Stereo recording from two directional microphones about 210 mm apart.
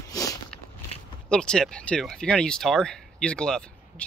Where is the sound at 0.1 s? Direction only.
15° left (ahead or behind).